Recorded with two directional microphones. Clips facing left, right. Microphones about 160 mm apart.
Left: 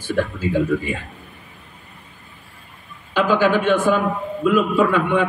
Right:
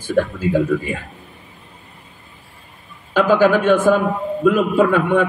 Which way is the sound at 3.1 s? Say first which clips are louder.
Right 3 dB; 45° right (ahead or behind).